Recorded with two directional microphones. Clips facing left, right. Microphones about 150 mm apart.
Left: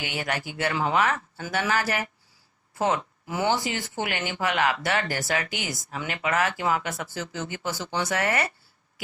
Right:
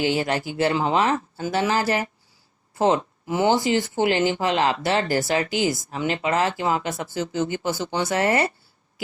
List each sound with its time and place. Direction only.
0.0 s speech: 30° right (ahead or behind)